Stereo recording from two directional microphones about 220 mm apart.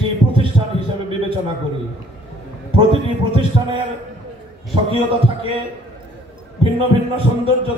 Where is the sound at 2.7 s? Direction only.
25° right (ahead or behind).